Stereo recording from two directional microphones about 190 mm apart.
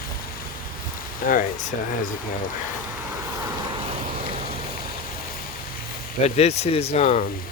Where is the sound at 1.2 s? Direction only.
45° left (ahead or behind).